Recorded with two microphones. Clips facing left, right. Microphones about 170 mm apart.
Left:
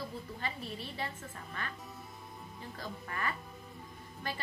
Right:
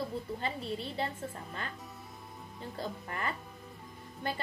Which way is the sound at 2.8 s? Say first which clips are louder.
Right 3 dB; 25° right (ahead or behind).